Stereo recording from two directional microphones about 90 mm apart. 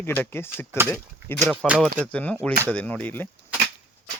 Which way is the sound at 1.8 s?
15° left (ahead or behind).